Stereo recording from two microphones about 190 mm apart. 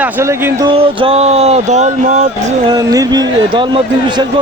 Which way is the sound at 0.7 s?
30° right (ahead or behind).